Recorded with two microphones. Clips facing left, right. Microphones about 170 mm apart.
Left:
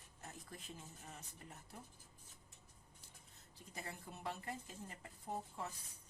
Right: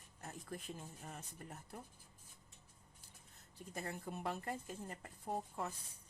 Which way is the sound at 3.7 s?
50° right (ahead or behind).